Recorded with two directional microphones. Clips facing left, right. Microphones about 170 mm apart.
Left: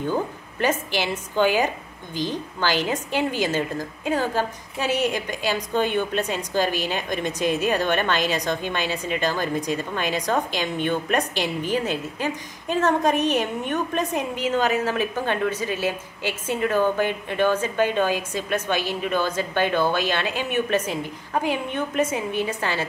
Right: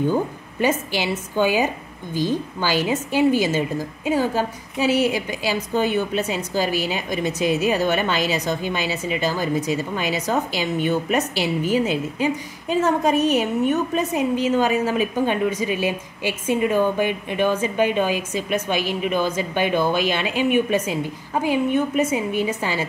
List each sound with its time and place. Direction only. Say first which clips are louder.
0.0 s a woman's voice: right 4 dB; 10° right (ahead or behind)